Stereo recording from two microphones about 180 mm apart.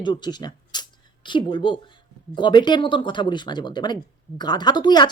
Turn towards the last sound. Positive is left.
turn(degrees=25)  # may be behind; listen again after turning